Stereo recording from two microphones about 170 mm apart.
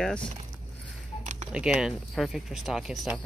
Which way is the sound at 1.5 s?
5° right (ahead or behind).